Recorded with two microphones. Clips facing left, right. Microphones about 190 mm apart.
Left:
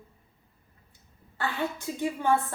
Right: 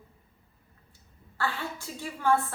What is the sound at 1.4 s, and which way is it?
Speech, 20° left (ahead or behind).